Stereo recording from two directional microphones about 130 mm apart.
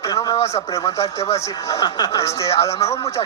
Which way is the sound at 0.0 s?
30° left (ahead or behind).